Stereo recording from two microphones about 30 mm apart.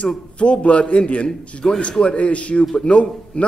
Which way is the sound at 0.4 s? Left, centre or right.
Left.